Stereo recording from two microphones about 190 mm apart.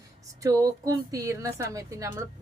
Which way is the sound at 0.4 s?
15° right (ahead or behind).